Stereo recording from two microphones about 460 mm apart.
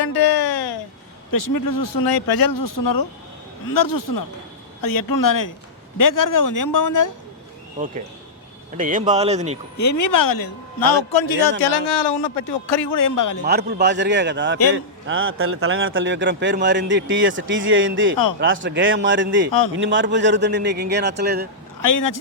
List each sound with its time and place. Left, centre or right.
0.0 s a sound: left
1.3 s speech: left
8.8 s speech: centre
9.7 s speech: left
13.4 s speech: right
21.8 s speech: left